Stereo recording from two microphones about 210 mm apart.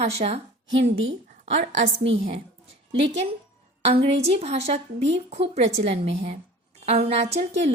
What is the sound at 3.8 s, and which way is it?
A woman's voice, 30° right (ahead or behind).